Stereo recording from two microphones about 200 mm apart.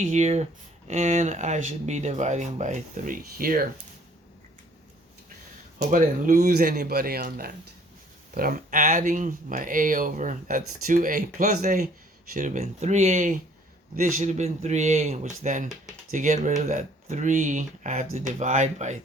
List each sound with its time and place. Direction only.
0.1 s speech: 35° right (ahead or behind)
5.9 s speech: 40° right (ahead or behind)